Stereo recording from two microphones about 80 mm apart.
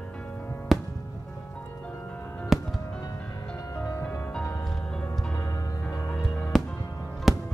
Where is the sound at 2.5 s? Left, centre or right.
Centre.